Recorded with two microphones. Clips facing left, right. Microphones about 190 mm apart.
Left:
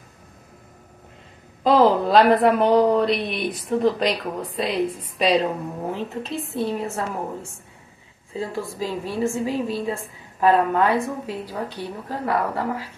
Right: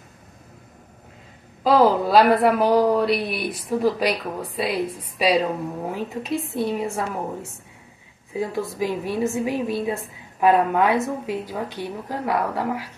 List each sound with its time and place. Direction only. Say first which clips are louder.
1.6 s a woman's voice: even; 5° right (ahead or behind)
8.3 s a woman's voice: right 2 dB; 15° right (ahead or behind)